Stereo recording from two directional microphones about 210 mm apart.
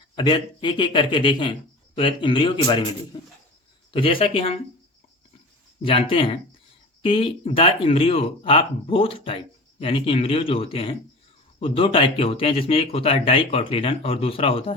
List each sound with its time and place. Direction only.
0.2 s speech: 20° left (ahead or behind)
5.8 s speech: 25° left (ahead or behind)